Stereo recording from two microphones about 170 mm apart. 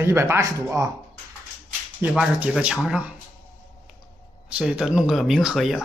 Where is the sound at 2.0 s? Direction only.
5° right (ahead or behind).